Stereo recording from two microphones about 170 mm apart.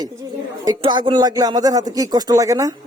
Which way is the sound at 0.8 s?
30° right (ahead or behind).